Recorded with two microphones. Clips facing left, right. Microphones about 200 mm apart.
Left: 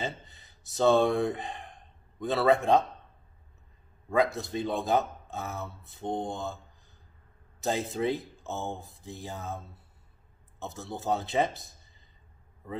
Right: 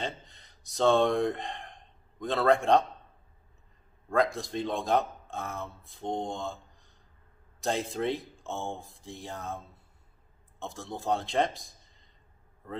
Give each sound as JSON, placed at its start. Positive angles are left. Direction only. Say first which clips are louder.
{"t": 0.0, "sound": "speech", "louder": "left 1 dB", "side_deg": 5}
{"t": 4.1, "sound": "speech", "louder": "left 1 dB", "side_deg": 5}
{"t": 10.6, "sound": "a man's voice", "louder": "even", "side_deg": 5}